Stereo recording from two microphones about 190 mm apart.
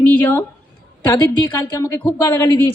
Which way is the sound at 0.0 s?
10° left (ahead or behind).